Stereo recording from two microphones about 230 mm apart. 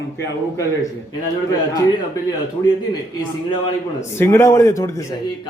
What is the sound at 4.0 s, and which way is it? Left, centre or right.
A man's voice, centre.